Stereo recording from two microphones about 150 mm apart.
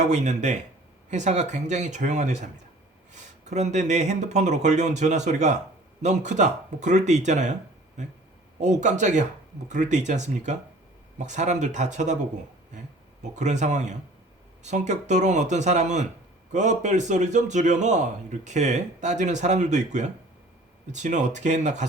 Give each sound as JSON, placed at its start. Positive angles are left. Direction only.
{"t": 0.0, "sound": "a man's voice", "side_deg": -50}
{"t": 13.2, "sound": "a man's voice", "side_deg": -50}